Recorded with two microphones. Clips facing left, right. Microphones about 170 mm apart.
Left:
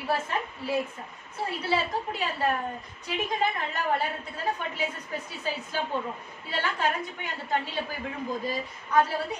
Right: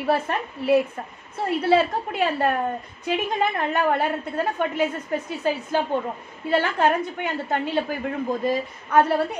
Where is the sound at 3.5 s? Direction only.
55° right (ahead or behind).